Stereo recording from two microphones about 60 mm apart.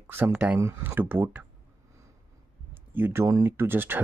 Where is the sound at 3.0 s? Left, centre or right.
Right.